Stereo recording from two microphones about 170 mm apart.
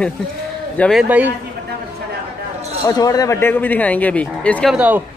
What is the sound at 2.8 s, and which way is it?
Speech, 20° left (ahead or behind).